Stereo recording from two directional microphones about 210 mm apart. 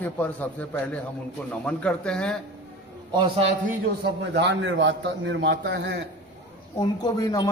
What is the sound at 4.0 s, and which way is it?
A man's voice, 55° right (ahead or behind).